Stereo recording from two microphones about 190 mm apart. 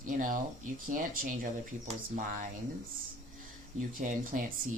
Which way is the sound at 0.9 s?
45° right (ahead or behind).